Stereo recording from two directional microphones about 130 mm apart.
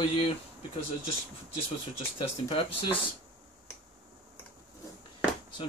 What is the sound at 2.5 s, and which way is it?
Speech, 45° left (ahead or behind).